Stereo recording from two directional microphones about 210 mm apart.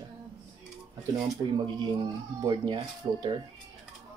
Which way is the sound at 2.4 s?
20° right (ahead or behind).